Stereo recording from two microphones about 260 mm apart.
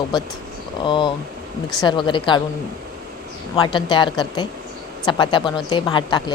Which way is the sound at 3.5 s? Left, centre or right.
Centre.